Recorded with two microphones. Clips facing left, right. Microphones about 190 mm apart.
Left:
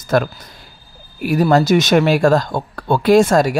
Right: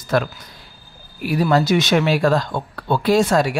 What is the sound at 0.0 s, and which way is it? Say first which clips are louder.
Speech: left 3 dB; 45° left (ahead or behind).